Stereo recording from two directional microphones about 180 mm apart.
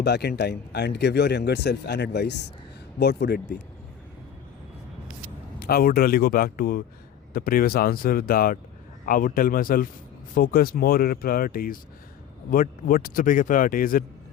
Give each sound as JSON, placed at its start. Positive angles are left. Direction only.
{"t": 0.0, "sound": "speech", "side_deg": 65}
{"t": 5.5, "sound": "speech", "side_deg": 55}